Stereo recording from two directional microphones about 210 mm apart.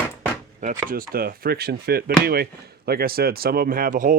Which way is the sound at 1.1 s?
45° right (ahead or behind).